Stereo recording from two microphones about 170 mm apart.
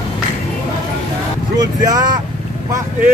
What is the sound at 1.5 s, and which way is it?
Vehicle, 20° right (ahead or behind).